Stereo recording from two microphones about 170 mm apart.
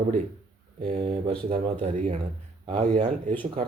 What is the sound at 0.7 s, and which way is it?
Speech, 40° right (ahead or behind).